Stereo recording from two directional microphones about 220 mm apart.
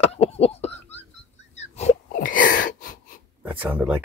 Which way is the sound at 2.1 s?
40° left (ahead or behind).